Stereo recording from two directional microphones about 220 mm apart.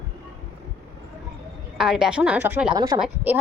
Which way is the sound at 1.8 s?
5° right (ahead or behind).